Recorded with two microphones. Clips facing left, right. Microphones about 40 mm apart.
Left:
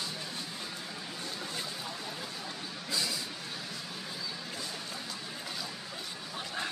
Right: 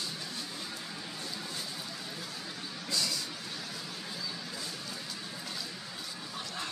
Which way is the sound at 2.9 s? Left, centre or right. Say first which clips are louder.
Even; centre.